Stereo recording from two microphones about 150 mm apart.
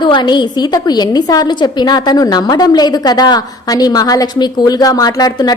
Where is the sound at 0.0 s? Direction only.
30° left (ahead or behind).